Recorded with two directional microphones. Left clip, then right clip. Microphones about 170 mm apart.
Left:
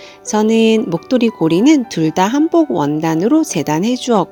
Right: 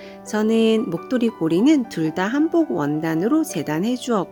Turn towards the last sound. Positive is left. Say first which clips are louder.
# left 7 dB
turn(degrees=25)  # may be behind; listen again after turning